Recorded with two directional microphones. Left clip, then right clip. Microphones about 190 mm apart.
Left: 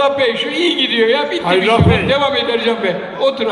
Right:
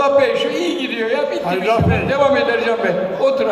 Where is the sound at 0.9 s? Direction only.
Centre (ahead or behind).